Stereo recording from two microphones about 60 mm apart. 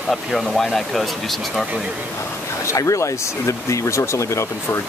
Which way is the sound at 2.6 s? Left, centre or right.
Left.